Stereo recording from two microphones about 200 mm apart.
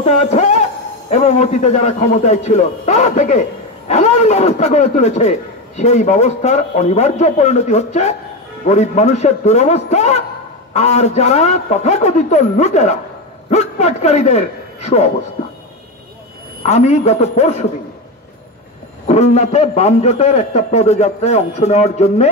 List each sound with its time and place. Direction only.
0.0 s a man's voice: 35° left (ahead or behind)
16.6 s a man's voice: 35° left (ahead or behind)
19.0 s a man's voice: 35° left (ahead or behind)